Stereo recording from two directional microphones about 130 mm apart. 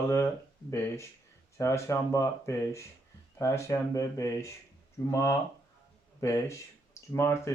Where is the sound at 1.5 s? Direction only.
20° left (ahead or behind).